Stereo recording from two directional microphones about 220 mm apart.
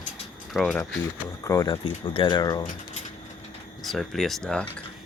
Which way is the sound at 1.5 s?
15° left (ahead or behind).